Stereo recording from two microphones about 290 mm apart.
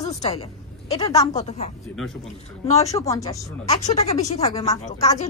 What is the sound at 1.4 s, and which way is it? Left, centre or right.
Speech, left.